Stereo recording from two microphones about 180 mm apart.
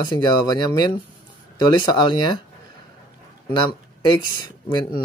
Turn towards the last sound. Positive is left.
turn(degrees=25)  # may be behind; listen again after turning